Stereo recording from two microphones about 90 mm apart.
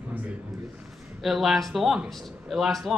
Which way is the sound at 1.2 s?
Centre (ahead or behind).